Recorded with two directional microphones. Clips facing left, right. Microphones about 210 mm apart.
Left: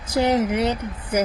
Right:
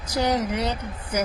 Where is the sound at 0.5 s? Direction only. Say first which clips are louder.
Left 5 dB; 60° left (ahead or behind).